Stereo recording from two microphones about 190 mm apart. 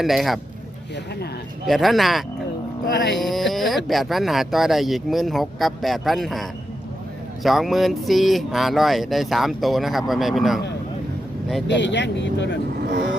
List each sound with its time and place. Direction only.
0.0 s speech: centre (ahead or behind)
1.6 s speech: centre (ahead or behind)
2.8 s music: 50° left (ahead or behind)
3.2 s speech: centre (ahead or behind)
7.4 s speech: centre (ahead or behind)
11.7 s speech: 70° left (ahead or behind)